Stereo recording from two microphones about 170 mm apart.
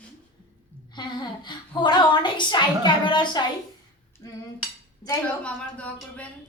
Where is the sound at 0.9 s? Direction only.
25° left (ahead or behind).